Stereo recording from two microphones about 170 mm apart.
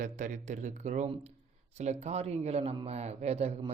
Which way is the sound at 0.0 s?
45° right (ahead or behind).